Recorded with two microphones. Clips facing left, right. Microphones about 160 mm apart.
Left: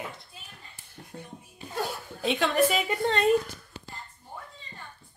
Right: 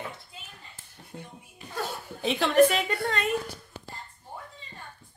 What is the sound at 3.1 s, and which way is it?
Speech, 30° left (ahead or behind).